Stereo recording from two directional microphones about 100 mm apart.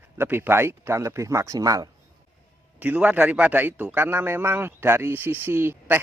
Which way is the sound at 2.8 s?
15° right (ahead or behind).